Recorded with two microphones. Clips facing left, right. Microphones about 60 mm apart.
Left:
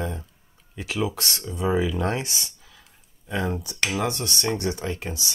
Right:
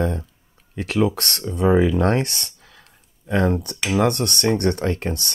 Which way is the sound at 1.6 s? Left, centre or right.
Right.